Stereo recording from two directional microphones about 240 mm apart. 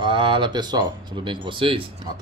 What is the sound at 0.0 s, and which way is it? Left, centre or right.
Speech, right.